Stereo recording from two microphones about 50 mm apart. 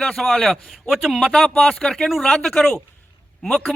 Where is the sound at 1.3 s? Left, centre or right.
Centre.